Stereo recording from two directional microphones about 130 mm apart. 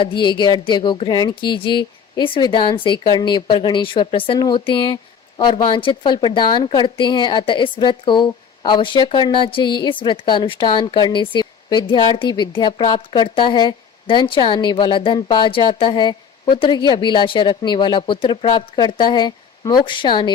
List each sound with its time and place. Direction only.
0.0 s a woman's voice: 40° left (ahead or behind)